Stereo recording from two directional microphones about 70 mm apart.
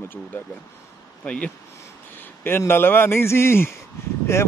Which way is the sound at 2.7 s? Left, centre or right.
Left.